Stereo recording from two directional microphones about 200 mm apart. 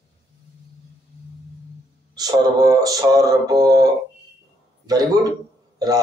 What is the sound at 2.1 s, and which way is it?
Speech, 20° right (ahead or behind).